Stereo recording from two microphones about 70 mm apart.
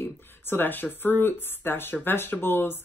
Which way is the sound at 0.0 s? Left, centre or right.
Left.